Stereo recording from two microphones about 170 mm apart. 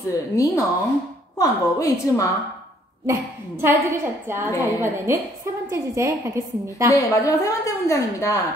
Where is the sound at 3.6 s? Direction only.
15° right (ahead or behind).